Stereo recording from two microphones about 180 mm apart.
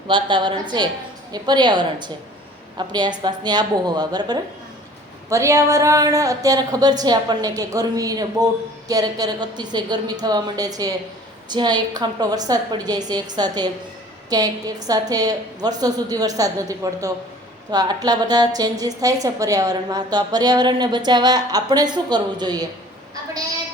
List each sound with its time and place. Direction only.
0.1 s a woman's voice: 25° right (ahead or behind)